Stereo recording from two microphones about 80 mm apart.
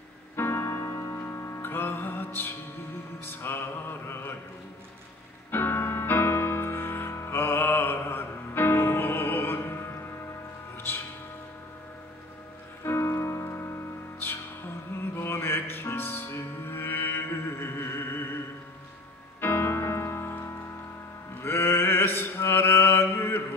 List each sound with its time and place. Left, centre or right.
0.4 s music: left
4.1 s a sound: left
5.5 s music: left
12.8 s music: left
19.4 s music: left
21.4 s mantra: left